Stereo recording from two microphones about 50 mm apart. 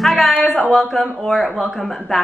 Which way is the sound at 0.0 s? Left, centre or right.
Centre.